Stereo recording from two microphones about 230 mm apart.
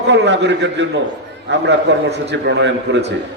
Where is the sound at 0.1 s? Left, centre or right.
Right.